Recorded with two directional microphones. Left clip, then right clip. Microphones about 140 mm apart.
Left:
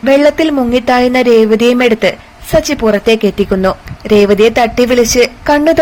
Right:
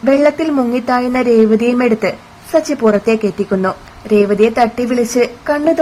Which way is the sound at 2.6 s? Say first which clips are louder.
Left 1 dB; 15° left (ahead or behind).